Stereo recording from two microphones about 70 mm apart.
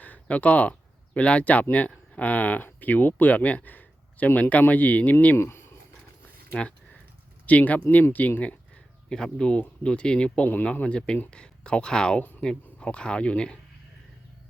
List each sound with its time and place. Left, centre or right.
0.0 s speech: left
5.4 s a sound: left
6.5 s speech: centre
9.0 s speech: centre